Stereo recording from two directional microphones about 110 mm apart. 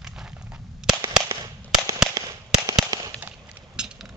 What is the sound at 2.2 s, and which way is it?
Firecracker, 35° right (ahead or behind).